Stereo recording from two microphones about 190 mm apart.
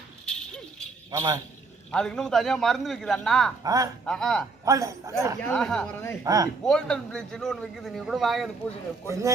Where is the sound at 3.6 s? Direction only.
20° right (ahead or behind).